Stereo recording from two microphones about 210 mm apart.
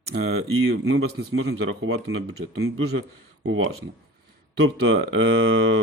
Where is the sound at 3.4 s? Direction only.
80° right.